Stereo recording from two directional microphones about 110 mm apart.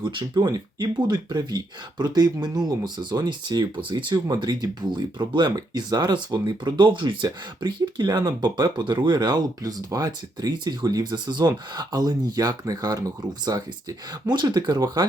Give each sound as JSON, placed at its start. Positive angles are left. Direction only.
{"t": 0.0, "sound": "speech", "side_deg": -45}